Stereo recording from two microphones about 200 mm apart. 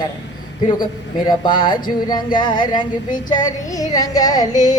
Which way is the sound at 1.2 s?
25° left (ahead or behind).